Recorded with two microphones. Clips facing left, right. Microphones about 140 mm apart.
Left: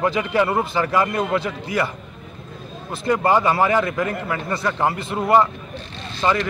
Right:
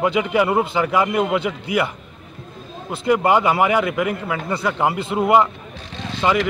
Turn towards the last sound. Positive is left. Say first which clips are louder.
# right 2 dB
turn(degrees=-15)  # may be behind; listen again after turning